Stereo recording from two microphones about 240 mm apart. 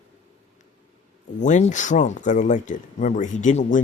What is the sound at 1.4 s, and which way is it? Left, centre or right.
Speech, left.